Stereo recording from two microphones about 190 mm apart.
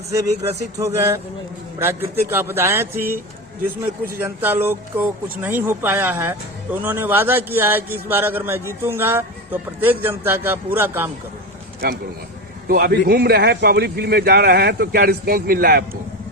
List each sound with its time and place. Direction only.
0.8 s a man's voice: 15° right (ahead or behind)
12.6 s a man's voice: 50° right (ahead or behind)